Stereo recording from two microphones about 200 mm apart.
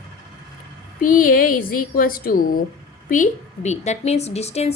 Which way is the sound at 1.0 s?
45° left (ahead or behind).